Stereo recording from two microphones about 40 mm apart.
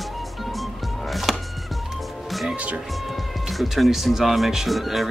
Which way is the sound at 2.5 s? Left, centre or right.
Right.